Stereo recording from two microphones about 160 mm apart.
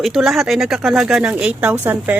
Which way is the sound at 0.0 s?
5° right (ahead or behind).